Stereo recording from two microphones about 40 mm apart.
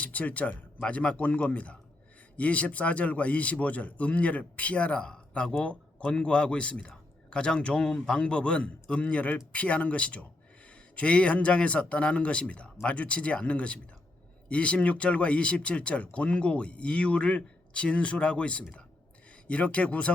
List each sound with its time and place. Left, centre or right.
0.0 s a man's voice: left